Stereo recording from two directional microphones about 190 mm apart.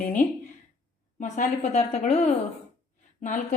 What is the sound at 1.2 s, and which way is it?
Speech, 40° left (ahead or behind).